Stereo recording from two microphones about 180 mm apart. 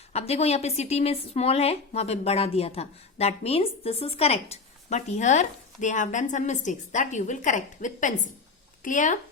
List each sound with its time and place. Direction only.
0.1 s speech: 35° left (ahead or behind)